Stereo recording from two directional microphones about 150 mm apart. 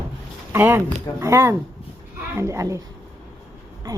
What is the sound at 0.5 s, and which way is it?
A woman's voice, 15° right (ahead or behind).